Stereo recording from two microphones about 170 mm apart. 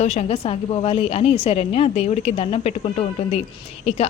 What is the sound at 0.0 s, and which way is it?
Speech, 40° left (ahead or behind).